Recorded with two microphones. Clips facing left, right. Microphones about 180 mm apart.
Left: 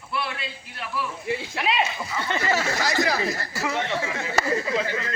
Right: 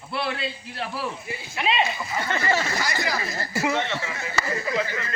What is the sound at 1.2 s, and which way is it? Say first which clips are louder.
Speech: left 8 dB; 80° left.